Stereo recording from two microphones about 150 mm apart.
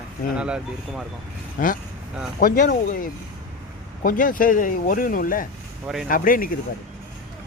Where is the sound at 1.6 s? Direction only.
70° left (ahead or behind).